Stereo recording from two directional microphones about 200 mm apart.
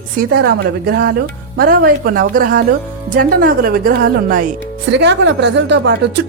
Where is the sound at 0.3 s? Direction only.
55° right (ahead or behind).